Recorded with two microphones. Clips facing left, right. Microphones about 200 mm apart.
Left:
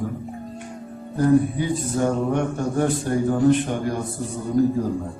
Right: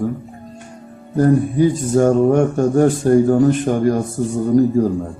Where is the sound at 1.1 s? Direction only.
45° right (ahead or behind).